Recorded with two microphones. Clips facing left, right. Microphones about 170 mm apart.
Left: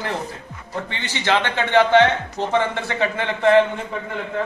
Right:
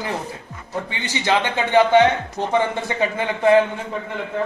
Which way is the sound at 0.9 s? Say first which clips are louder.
Even; 15° right (ahead or behind).